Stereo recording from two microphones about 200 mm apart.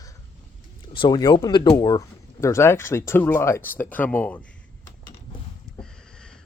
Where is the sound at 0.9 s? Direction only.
25° left (ahead or behind); by 4.5 s 5° left (ahead or behind).